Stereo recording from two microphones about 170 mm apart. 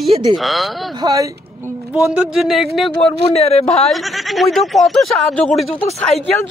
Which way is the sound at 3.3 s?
35° left (ahead or behind).